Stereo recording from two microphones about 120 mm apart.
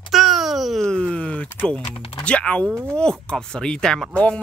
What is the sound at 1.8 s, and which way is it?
Speech, 55° left (ahead or behind).